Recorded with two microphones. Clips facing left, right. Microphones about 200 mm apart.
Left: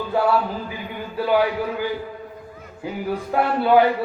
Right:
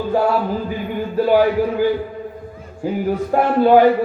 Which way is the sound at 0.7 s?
45° right (ahead or behind).